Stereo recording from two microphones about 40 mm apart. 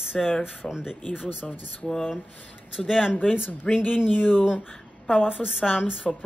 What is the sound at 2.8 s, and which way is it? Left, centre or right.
Speech, centre.